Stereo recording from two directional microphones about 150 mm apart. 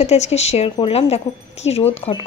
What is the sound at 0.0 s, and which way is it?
Speech, 45° left (ahead or behind).